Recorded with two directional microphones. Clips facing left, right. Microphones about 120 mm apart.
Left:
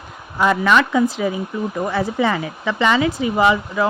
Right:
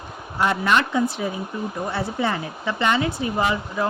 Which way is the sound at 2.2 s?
90° left.